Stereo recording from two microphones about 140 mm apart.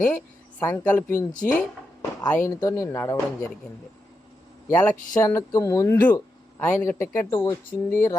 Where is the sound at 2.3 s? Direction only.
10° left (ahead or behind).